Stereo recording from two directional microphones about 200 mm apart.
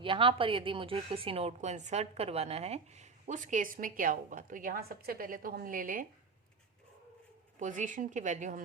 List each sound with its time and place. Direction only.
0.0 s a woman's voice: 25° right (ahead or behind); by 6.1 s 45° right (ahead or behind)
7.6 s a woman's voice: 40° right (ahead or behind)